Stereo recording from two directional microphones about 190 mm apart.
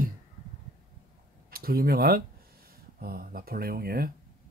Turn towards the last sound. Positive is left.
turn(degrees=-50)  # may be behind; listen again after turning